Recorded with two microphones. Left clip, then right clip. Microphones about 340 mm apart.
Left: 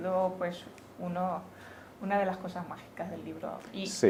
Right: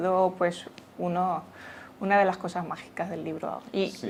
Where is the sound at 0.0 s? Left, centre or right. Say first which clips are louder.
Right 6 dB; right.